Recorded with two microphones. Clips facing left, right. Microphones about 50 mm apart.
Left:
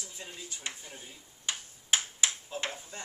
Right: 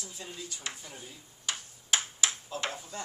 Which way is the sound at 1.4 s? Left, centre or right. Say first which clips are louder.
Even; left.